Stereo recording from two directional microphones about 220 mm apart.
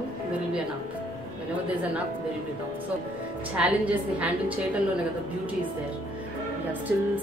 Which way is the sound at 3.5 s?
5° right (ahead or behind).